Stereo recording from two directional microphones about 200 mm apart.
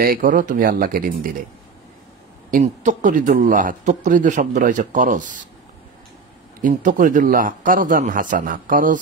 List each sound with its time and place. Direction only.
0.0 s speech: 45° right (ahead or behind)
2.5 s a man's voice: 40° right (ahead or behind)
6.6 s a man's voice: 40° right (ahead or behind)